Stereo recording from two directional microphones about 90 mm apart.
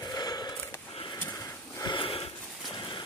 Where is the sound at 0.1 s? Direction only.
45° left (ahead or behind).